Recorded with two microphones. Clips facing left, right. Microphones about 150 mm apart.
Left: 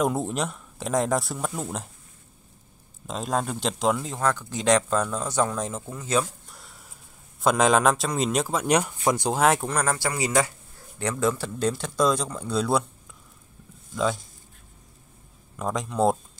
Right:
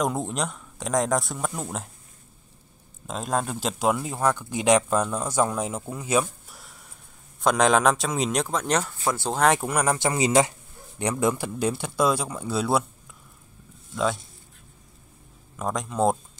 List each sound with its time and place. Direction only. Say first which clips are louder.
0.0 s speech: left 1 dB; centre (ahead or behind)
3.1 s speech: even; centre (ahead or behind)
6.5 s a sound: even; centre (ahead or behind)
7.4 s speech: even; centre (ahead or behind)
9.4 s speech: right 2 dB; centre (ahead or behind)
9.7 s speech: right 2 dB; 15° right (ahead or behind)
13.9 s speech: even; centre (ahead or behind)
15.5 s speech: even; centre (ahead or behind)